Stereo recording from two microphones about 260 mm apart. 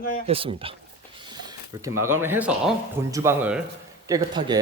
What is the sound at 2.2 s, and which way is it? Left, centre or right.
Speech, centre.